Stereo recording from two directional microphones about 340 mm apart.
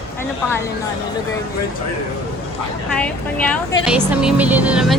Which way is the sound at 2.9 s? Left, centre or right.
Centre.